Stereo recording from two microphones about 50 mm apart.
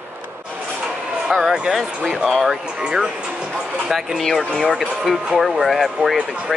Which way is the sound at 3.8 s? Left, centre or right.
Centre.